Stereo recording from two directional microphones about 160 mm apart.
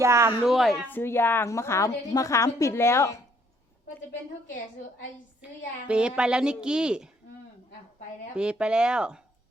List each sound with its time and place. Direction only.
0.0 s speech: 15° right (ahead or behind)
0.4 s a woman's voice: centre (ahead or behind)
0.9 s a woman's voice: 15° left (ahead or behind)
5.9 s a woman's voice: 5° right (ahead or behind)
8.4 s a woman's voice: 5° right (ahead or behind)